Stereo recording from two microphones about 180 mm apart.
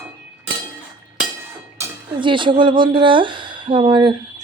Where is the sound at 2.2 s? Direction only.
25° right (ahead or behind).